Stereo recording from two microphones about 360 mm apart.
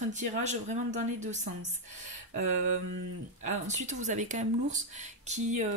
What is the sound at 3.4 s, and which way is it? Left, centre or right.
Speech, centre.